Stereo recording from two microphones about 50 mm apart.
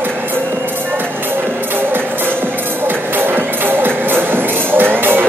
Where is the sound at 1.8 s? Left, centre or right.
Right.